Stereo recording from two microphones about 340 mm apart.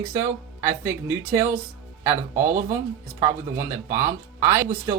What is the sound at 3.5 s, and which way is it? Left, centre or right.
Speech, centre.